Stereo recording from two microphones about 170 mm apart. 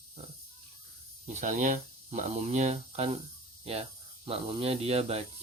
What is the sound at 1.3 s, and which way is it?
Speech, 45° right (ahead or behind).